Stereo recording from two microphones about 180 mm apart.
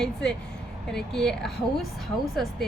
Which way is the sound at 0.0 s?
5° left (ahead or behind).